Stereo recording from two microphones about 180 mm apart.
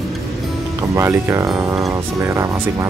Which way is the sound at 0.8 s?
15° right (ahead or behind).